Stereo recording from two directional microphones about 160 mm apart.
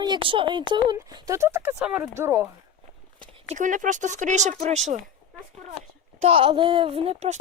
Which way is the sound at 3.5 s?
55° right (ahead or behind).